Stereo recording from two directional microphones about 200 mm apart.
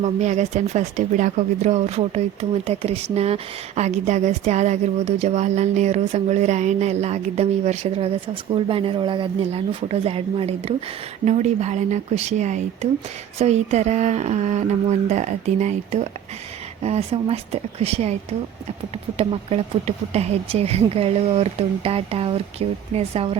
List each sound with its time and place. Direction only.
0.0 s speech: 35° right (ahead or behind)
19.1 s speech: 30° right (ahead or behind)